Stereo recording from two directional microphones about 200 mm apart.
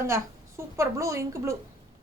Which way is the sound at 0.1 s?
15° right (ahead or behind).